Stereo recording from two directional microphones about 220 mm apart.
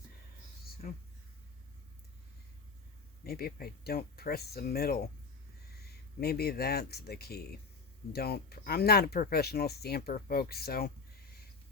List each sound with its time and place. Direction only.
3.2 s speech: 45° left (ahead or behind)